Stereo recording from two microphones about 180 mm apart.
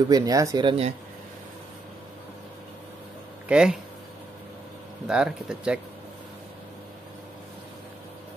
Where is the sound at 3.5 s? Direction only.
5° right (ahead or behind).